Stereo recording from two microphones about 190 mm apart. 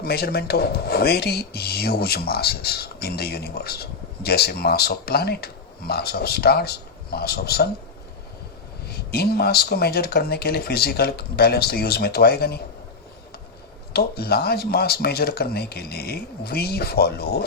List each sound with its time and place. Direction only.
0.0 s speech: 55° left (ahead or behind)
8.9 s speech: 55° left (ahead or behind)
13.9 s speech: 55° left (ahead or behind)